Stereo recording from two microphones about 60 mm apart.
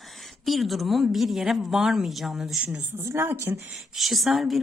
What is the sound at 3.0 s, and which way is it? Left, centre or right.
Speech, right.